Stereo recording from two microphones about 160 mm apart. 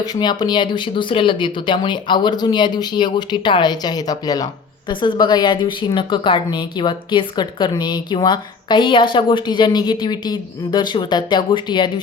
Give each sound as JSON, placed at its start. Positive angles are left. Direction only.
{"t": 0.0, "sound": "a woman's voice", "side_deg": 25}